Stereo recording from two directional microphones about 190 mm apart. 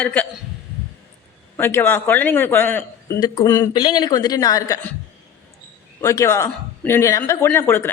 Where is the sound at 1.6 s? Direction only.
10° left (ahead or behind).